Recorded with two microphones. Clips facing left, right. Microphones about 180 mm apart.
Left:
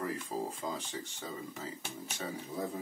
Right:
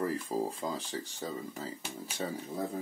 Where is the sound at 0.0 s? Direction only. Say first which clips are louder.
Right 4 dB; 35° right (ahead or behind).